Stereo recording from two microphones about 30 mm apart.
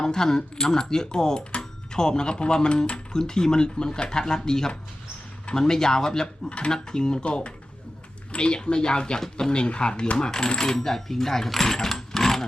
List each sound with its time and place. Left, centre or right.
0.0 s speech: centre
7.3 s speech: left
10.2 s coin: left